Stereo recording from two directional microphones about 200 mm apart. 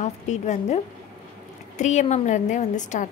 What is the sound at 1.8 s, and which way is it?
A woman's voice, 35° left (ahead or behind).